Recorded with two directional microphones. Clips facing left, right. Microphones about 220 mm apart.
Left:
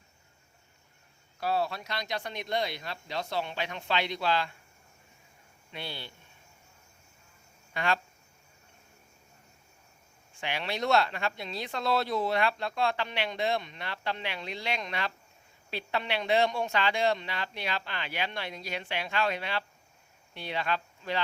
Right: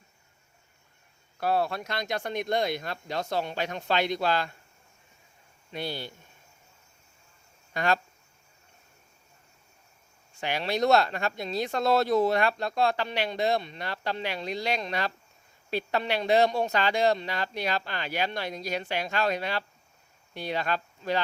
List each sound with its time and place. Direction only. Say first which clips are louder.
1.4 s speech: right 3 dB; 55° right (ahead or behind)
5.7 s speech: right 7 dB; 40° right (ahead or behind)
7.7 s speech: right 4 dB; 40° right (ahead or behind)
10.3 s speech: right 5 dB; 40° right (ahead or behind)